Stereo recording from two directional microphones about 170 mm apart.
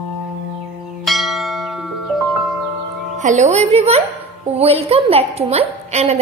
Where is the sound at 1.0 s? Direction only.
Centre (ahead or behind).